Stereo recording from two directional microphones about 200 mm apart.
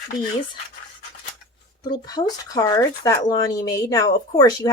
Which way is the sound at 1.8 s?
20° left (ahead or behind).